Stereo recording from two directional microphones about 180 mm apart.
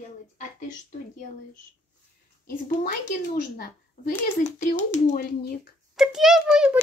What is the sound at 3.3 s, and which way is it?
Speech, 55° left (ahead or behind).